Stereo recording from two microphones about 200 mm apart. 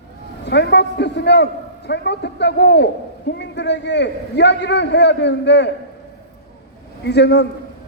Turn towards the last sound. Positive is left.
turn(degrees=55)  # may be behind; listen again after turning